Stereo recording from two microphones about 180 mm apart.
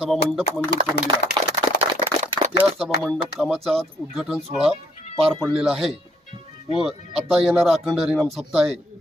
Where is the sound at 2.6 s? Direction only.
Centre (ahead or behind).